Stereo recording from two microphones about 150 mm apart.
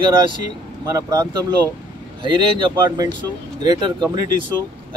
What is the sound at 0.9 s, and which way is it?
Speech, 25° right (ahead or behind).